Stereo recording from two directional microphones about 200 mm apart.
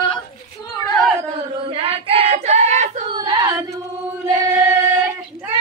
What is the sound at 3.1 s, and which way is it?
Singing, 20° right (ahead or behind).